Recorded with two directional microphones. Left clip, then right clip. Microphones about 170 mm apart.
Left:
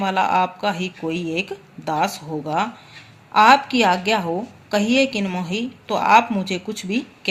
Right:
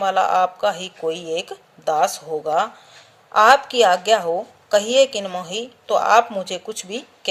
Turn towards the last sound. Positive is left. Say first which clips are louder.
# left 3 dB
turn(degrees=-50)  # may be behind; listen again after turning